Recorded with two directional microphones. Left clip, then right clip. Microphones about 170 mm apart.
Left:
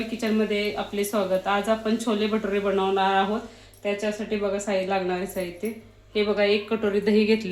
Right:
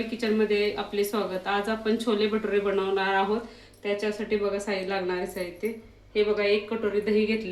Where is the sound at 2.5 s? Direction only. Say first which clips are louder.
Left 2 dB; 35° left (ahead or behind).